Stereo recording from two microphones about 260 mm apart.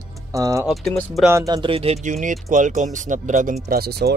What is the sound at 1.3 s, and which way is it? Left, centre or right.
Speech, centre.